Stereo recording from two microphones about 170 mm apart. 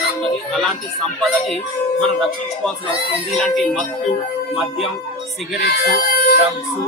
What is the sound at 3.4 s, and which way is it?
Speech, centre (ahead or behind).